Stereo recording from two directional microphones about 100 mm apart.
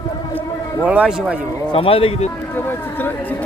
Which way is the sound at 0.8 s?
15° right (ahead or behind).